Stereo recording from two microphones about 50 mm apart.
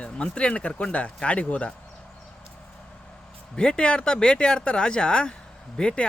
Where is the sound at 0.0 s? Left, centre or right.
Left.